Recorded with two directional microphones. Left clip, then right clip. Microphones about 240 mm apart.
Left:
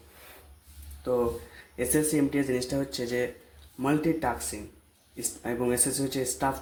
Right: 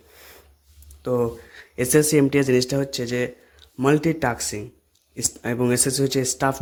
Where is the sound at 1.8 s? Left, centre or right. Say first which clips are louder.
Right 8 dB; right.